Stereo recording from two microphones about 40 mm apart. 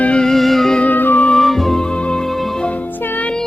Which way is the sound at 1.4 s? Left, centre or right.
Centre.